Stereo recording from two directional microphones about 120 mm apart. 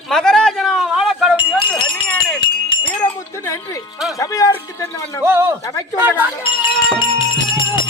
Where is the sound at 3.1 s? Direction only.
25° left (ahead or behind).